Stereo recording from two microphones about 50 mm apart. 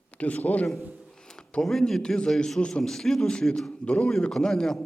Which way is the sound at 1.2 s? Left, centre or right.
Centre.